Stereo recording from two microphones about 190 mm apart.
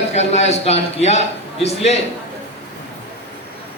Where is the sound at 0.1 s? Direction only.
35° left (ahead or behind).